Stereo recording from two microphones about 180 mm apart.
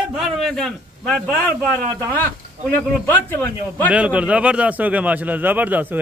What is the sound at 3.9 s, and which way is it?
A man's voice, 5° right (ahead or behind).